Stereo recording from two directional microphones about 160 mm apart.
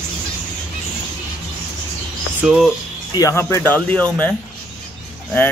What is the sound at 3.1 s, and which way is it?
Speech, 20° left (ahead or behind).